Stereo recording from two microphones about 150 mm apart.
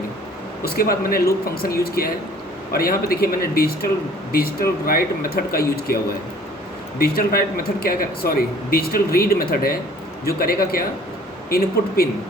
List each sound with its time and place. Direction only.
0.6 s speech: 80° left